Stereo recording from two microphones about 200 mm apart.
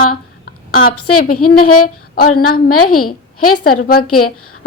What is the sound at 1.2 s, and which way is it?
A woman's voice, 50° left (ahead or behind).